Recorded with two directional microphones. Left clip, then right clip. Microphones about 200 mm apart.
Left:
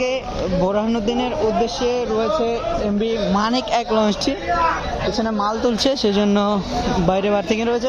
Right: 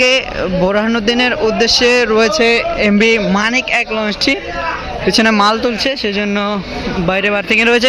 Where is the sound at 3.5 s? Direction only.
15° left (ahead or behind).